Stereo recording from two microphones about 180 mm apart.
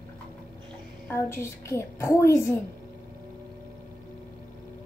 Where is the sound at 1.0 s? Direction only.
15° left (ahead or behind).